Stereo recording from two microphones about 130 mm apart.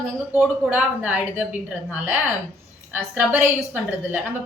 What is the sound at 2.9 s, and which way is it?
A woman's voice, 15° right (ahead or behind).